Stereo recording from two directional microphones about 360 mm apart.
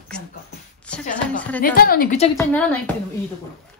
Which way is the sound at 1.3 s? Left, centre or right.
Centre.